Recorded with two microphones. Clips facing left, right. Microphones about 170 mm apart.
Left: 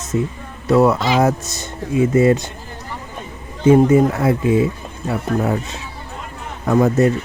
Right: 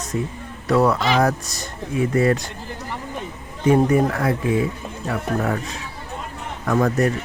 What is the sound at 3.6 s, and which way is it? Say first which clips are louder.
Speech: left 5 dB; 20° left (ahead or behind).